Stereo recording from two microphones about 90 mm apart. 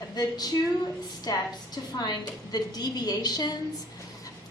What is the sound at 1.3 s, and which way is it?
A woman's voice, 45° left (ahead or behind).